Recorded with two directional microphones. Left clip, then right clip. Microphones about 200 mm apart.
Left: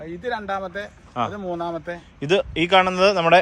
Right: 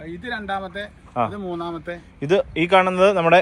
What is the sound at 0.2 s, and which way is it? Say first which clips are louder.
Speech: left 1 dB; 35° left (ahead or behind).